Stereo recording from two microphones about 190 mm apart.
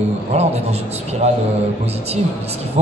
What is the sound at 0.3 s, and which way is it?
Speech, 35° right (ahead or behind).